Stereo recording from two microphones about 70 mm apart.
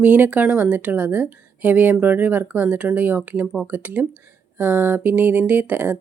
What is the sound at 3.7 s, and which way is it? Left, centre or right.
A woman's voice, right.